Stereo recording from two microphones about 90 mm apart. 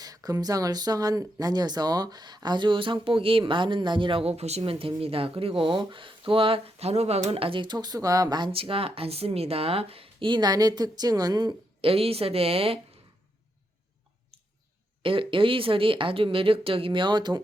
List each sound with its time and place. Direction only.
0.0 s speech: 45° right (ahead or behind)
8.4 s speech: 80° right; by 11.5 s 45° right (ahead or behind)
11.8 s a woman's voice: 90° right
15.0 s speech: 75° right (ahead or behind); by 17.4 s 55° right (ahead or behind)